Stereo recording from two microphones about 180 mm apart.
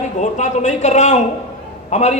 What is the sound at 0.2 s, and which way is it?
A man's voice, 40° left (ahead or behind).